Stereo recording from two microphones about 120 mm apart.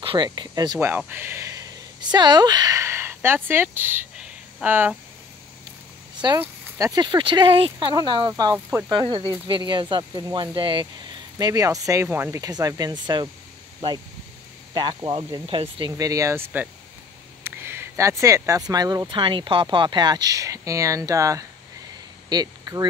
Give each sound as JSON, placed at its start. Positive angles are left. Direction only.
{"t": 0.0, "sound": "speech", "side_deg": -40}
{"t": 0.7, "sound": "speech", "side_deg": -20}
{"t": 2.0, "sound": "speech", "side_deg": -35}
{"t": 6.8, "sound": "speech", "side_deg": -35}
{"t": 8.6, "sound": "speech", "side_deg": -20}
{"t": 8.9, "sound": "speech", "side_deg": -40}
{"t": 11.3, "sound": "speech", "side_deg": -30}
{"t": 15.9, "sound": "speech", "side_deg": -30}